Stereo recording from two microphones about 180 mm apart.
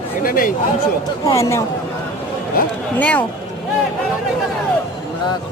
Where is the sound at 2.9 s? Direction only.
10° left (ahead or behind).